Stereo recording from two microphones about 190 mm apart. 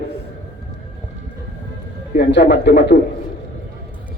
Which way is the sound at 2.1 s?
60° left (ahead or behind).